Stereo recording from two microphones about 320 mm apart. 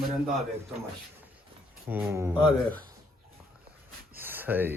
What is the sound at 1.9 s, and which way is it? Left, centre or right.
Speech, centre.